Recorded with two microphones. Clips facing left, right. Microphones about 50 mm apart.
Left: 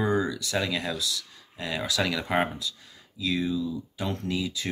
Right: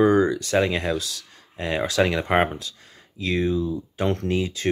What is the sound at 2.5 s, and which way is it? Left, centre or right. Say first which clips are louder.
Speech: right 2 dB; right.